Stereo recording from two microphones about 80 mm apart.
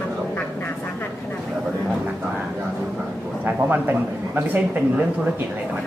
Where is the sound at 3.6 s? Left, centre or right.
Right.